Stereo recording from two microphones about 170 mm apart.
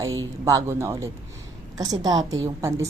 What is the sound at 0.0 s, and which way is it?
A woman's voice, 20° right (ahead or behind).